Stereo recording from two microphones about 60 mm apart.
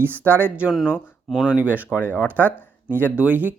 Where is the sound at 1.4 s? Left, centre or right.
Right.